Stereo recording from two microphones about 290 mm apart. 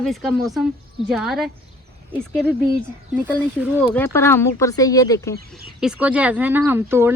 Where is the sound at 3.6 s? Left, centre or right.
Centre.